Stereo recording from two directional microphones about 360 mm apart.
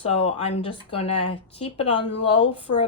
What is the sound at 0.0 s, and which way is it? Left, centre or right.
Speech, centre.